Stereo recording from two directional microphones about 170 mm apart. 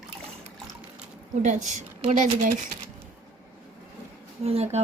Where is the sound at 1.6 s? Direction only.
45° right (ahead or behind).